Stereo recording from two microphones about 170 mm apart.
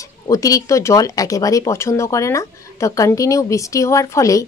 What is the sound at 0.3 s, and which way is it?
Speech, 20° left (ahead or behind).